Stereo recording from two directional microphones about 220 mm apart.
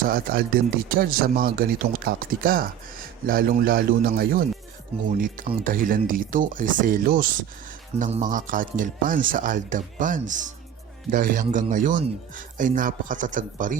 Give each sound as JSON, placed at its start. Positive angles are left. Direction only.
{"t": 0.0, "sound": "a man's voice", "side_deg": -40}